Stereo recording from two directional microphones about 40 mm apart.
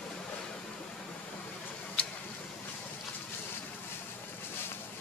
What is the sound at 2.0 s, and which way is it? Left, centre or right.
Tick-tock, left.